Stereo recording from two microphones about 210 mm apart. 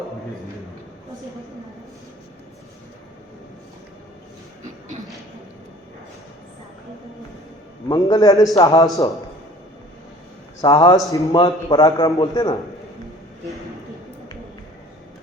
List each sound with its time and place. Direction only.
7.9 s a man's voice: 20° left (ahead or behind)
10.6 s a man's voice: 20° left (ahead or behind)